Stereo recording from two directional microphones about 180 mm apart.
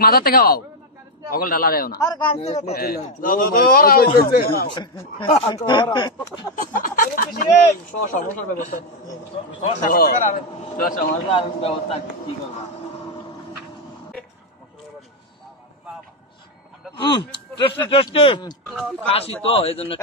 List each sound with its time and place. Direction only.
0.0 s a man's voice: 60° left (ahead or behind)
2.0 s a man's voice: 25° left (ahead or behind)
2.7 s a man's voice: 55° left (ahead or behind)
4.6 s speech: 25° left (ahead or behind)
6.5 s a sound: 50° left (ahead or behind)
8.1 s a man's voice: 45° left (ahead or behind)
11.3 s a man's voice: 35° left (ahead or behind)
16.9 s a man's voice: 25° left (ahead or behind)